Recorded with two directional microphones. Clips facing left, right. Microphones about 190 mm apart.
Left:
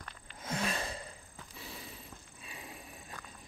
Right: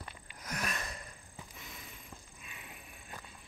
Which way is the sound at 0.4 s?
25° left (ahead or behind).